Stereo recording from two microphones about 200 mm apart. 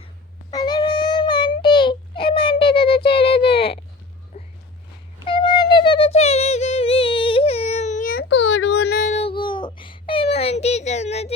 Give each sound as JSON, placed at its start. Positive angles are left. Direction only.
{"t": 0.5, "sound": "child singing", "side_deg": 20}
{"t": 4.3, "sound": "walk", "side_deg": 45}
{"t": 5.2, "sound": "wind instrument", "side_deg": 25}
{"t": 9.0, "sound": "baby cry", "side_deg": 30}